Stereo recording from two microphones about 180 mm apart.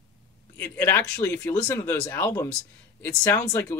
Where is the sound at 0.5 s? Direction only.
10° left (ahead or behind).